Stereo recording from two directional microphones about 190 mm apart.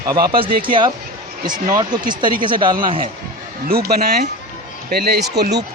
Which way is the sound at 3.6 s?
55° right (ahead or behind).